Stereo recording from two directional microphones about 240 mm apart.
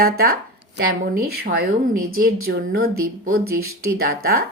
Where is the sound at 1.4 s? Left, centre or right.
Right.